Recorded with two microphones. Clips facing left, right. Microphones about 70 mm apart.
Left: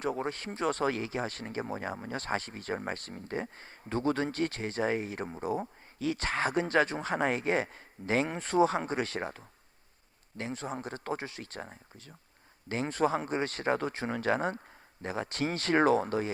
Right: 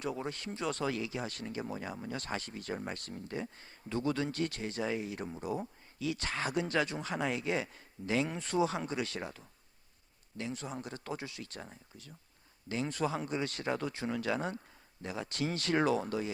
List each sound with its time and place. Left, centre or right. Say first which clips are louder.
0.0 s speech: left 4 dB; left